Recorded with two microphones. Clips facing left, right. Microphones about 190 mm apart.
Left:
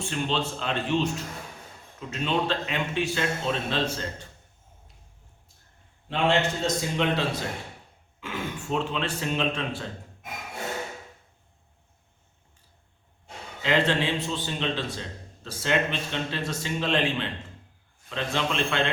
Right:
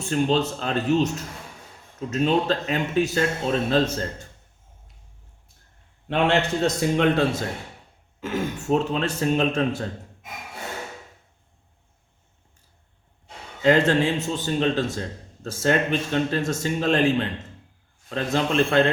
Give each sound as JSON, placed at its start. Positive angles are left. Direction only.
{"t": 0.0, "sound": "a man's voice", "side_deg": -40}
{"t": 6.1, "sound": "a man's voice", "side_deg": -65}
{"t": 8.2, "sound": "speech", "side_deg": -40}
{"t": 13.6, "sound": "a man's voice", "side_deg": -45}